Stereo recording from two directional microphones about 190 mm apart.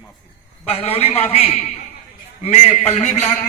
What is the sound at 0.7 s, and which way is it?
A man's voice, 30° left (ahead or behind).